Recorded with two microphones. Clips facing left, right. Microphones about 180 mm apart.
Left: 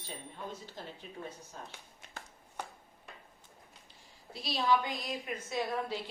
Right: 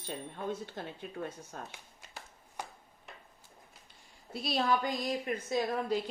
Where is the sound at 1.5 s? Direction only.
60° right (ahead or behind).